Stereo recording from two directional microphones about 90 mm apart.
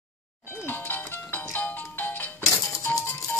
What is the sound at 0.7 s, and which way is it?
Music, 20° left (ahead or behind).